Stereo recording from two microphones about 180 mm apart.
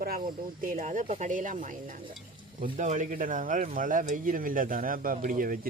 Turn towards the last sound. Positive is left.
turn(degrees=-50)  # may be behind; listen again after turning